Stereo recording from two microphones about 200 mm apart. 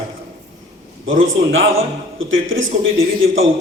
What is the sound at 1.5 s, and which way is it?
A man's voice, 80° right.